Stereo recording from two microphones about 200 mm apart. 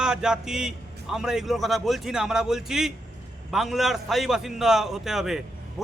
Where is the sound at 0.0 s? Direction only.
5° right (ahead or behind).